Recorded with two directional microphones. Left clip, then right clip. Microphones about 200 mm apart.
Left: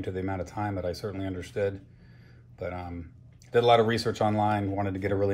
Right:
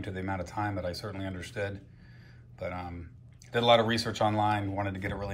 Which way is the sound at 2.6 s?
40° left (ahead or behind).